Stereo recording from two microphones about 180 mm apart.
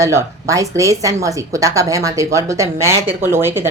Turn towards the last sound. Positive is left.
turn(degrees=-15)  # may be behind; listen again after turning